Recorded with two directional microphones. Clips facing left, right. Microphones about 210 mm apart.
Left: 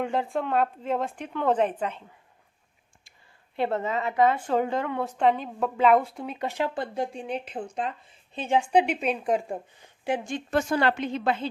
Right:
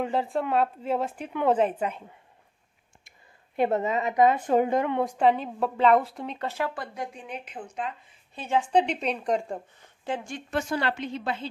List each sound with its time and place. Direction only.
0.0 s a woman's voice: centre (ahead or behind)
3.5 s a woman's voice: 20° right (ahead or behind)
5.1 s a woman's voice: 5° right (ahead or behind)
6.3 s speech: 15° left (ahead or behind); by 7.9 s 35° left (ahead or behind)
8.4 s a woman's voice: 15° left (ahead or behind)
10.5 s a woman's voice: 50° left (ahead or behind)